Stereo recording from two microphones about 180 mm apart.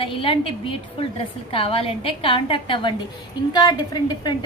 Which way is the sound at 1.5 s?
30° left (ahead or behind).